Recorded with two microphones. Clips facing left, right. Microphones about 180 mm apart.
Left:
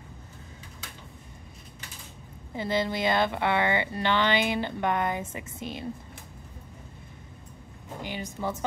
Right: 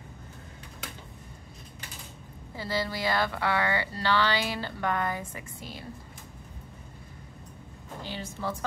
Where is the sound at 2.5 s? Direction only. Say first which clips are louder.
Left 4 dB; 20° left (ahead or behind).